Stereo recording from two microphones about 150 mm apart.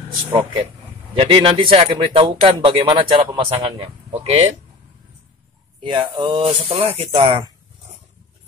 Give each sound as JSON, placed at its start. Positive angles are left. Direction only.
{"t": 0.3, "sound": "speech", "side_deg": -30}
{"t": 5.8, "sound": "speech", "side_deg": -30}